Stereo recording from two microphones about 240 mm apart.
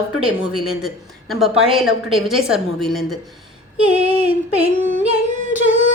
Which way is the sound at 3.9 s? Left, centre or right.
Right.